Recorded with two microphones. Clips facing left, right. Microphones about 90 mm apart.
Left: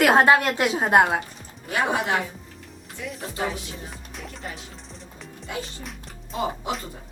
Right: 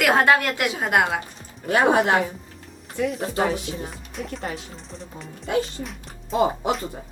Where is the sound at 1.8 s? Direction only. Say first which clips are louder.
Right 6 dB; 50° right (ahead or behind).